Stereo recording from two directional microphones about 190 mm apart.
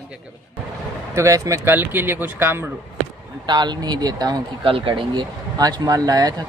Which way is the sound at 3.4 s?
25° right (ahead or behind).